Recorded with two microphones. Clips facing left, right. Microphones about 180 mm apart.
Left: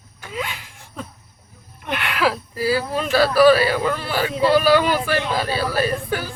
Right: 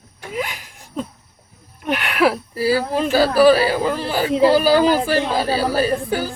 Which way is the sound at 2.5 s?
35° right (ahead or behind).